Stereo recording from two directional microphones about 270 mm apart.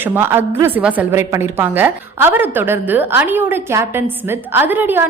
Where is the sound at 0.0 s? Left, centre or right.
Centre.